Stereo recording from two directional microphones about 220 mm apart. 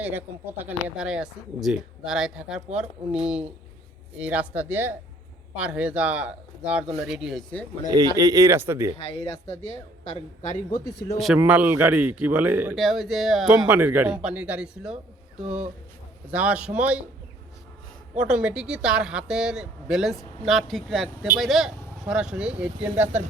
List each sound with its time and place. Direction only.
0.0 s speech: 10° right (ahead or behind)
4.2 s speech: 5° right (ahead or behind)
7.9 s speech: 15° right (ahead or behind)
9.0 s a man's voice: 30° left (ahead or behind)
11.3 s speech: 5° right (ahead or behind)
18.2 s speech: 5° right (ahead or behind)